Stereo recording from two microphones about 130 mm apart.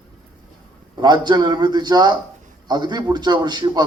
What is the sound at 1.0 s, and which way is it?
A man's voice, 35° right (ahead or behind).